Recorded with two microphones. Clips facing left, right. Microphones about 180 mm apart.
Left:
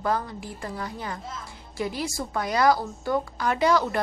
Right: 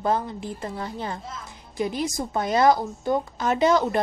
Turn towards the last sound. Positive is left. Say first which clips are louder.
# right 2 dB
turn(degrees=-20)  # may be behind; listen again after turning